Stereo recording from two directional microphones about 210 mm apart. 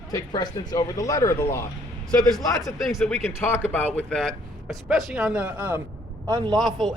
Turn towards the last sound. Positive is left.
turn(degrees=-20)  # may be behind; listen again after turning